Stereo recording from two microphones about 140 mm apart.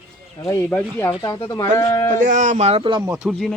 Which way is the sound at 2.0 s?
70° right (ahead or behind).